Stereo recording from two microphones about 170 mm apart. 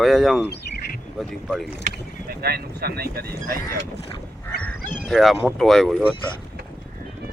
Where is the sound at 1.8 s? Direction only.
60° right (ahead or behind).